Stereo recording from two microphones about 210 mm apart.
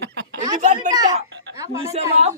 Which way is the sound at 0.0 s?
50° right (ahead or behind).